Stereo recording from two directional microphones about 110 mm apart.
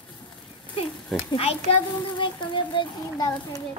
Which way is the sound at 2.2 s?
45° left (ahead or behind).